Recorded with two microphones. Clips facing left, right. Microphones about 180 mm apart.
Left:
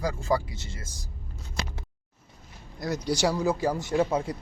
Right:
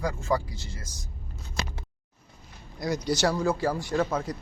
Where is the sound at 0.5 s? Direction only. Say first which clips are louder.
Even; 25° left (ahead or behind).